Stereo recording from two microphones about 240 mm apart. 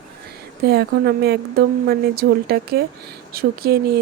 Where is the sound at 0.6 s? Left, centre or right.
Right.